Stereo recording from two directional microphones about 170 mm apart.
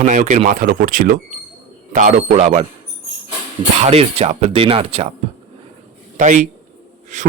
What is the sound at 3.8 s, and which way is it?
Speech, 40° right (ahead or behind).